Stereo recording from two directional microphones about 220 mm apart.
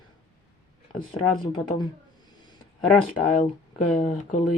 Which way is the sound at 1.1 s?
20° left (ahead or behind).